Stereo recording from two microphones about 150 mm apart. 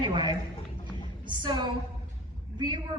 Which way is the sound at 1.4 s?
30° right (ahead or behind).